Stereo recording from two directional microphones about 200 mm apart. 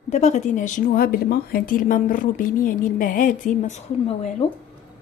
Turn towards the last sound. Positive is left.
turn(degrees=30)  # may be behind; listen again after turning